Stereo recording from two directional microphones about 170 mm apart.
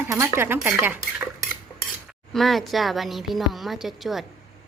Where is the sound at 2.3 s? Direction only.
Centre (ahead or behind).